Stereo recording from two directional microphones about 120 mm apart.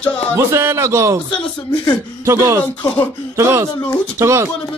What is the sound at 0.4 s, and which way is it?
Speech, 20° right (ahead or behind).